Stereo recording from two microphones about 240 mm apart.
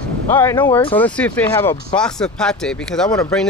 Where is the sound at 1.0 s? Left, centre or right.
Centre.